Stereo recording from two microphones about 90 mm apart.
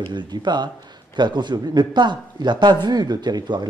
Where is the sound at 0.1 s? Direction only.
55° right (ahead or behind).